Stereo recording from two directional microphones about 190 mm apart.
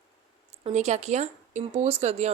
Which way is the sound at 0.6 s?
35° right (ahead or behind).